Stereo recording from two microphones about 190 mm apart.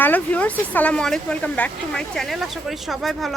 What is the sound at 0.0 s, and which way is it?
Speech, 10° left (ahead or behind).